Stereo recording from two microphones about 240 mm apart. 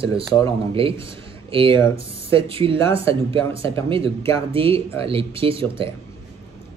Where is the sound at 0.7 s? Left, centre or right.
Right.